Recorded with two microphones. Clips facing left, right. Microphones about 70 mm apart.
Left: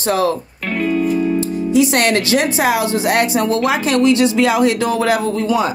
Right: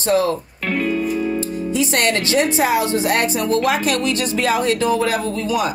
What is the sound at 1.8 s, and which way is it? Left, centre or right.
Speech, left.